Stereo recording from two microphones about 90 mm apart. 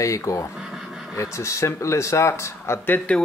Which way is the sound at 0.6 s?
5° right (ahead or behind).